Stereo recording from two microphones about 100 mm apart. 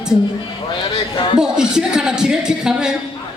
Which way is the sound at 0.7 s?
55° left (ahead or behind).